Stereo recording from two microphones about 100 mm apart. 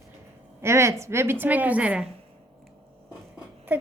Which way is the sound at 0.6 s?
25° right (ahead or behind).